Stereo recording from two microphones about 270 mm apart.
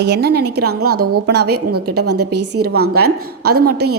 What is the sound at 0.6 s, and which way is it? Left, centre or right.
Speech, right.